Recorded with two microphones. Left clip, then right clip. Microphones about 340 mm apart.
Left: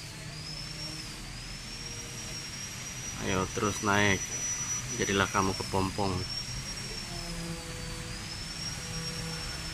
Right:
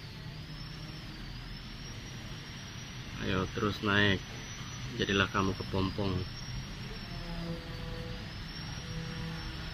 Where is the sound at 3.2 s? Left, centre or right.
Centre.